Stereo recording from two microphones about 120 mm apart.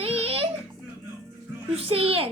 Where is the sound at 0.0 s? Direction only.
55° right (ahead or behind).